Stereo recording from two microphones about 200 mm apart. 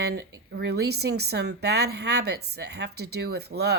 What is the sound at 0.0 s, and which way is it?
A woman's voice, 55° right (ahead or behind).